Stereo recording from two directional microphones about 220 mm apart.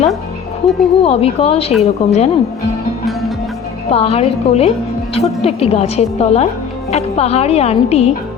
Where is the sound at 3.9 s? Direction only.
25° left (ahead or behind).